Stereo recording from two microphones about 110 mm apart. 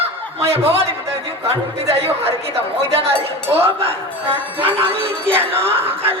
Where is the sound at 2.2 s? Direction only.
65° right (ahead or behind).